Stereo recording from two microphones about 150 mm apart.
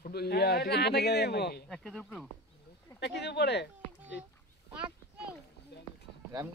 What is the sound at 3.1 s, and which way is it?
Speech, 90° left.